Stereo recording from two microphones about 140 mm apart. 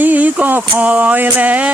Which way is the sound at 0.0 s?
10° right (ahead or behind).